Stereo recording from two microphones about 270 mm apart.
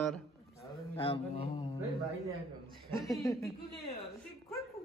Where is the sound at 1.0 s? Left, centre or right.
Left.